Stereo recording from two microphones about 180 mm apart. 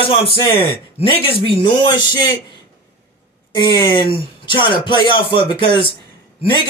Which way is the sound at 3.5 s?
25° left (ahead or behind).